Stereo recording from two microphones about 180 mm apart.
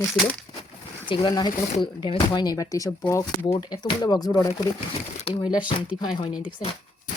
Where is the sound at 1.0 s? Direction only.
25° left (ahead or behind).